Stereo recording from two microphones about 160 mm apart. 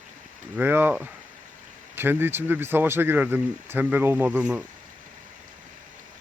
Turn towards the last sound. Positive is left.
turn(degrees=-5)  # may be behind; listen again after turning